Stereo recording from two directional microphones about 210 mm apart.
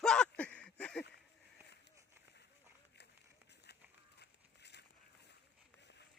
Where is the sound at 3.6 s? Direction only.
50° left (ahead or behind).